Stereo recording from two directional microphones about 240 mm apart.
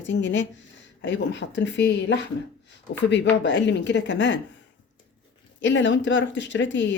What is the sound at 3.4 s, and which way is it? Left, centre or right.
Speech, left.